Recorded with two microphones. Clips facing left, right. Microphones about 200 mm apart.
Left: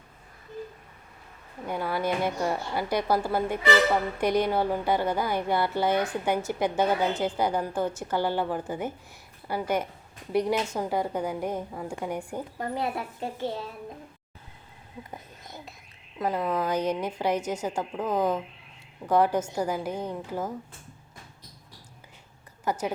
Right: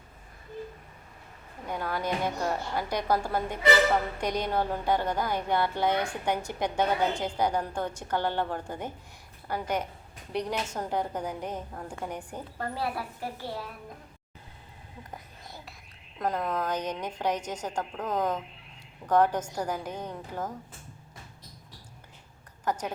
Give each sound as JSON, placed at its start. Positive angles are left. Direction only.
{"t": 1.6, "sound": "a woman's voice", "side_deg": 5}
{"t": 16.1, "sound": "a woman's voice", "side_deg": 5}
{"t": 22.6, "sound": "speech", "side_deg": 10}